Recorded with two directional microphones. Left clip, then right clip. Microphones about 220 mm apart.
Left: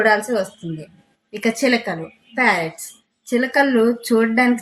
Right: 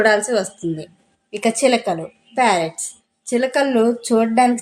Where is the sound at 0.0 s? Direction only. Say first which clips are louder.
Right 1 dB; 40° right (ahead or behind).